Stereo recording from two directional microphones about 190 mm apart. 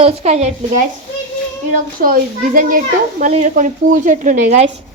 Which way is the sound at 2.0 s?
50° right (ahead or behind).